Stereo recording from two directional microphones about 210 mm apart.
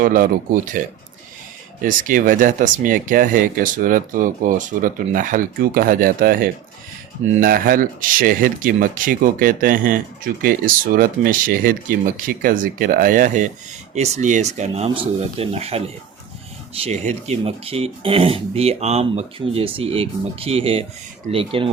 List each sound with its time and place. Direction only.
0.0 s speech: 40° right (ahead or behind)
1.8 s speech: 40° right (ahead or behind)